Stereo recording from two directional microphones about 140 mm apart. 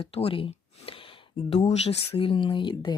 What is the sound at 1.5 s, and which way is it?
Speech, 55° left (ahead or behind).